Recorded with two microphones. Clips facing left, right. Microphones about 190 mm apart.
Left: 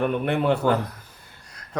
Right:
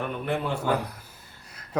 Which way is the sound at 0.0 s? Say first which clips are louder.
Left 6 dB; 65° left (ahead or behind).